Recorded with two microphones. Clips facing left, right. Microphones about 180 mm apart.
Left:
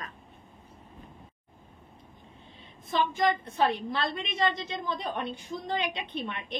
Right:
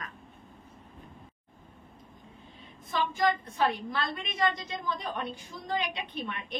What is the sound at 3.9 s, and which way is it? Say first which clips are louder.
A woman's voice: left 2 dB; 25° left (ahead or behind).